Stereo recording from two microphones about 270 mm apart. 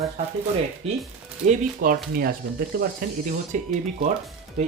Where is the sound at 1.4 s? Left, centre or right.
Right.